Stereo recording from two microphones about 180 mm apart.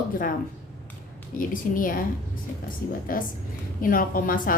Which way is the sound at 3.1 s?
50° left (ahead or behind).